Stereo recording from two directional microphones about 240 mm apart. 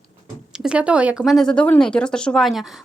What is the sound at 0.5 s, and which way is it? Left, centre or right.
Speech, centre.